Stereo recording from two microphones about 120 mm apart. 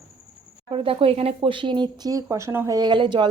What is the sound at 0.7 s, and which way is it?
Speech, 45° right (ahead or behind).